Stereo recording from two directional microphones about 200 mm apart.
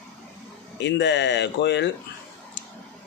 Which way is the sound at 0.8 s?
65° left (ahead or behind).